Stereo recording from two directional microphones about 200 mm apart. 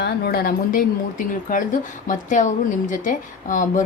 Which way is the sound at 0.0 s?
50° left (ahead or behind).